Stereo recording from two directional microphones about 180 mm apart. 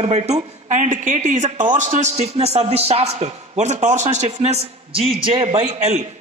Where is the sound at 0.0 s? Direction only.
35° right (ahead or behind).